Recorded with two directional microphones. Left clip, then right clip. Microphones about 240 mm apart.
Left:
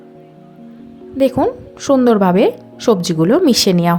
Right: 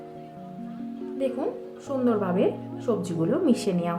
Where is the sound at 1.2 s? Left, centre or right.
Left.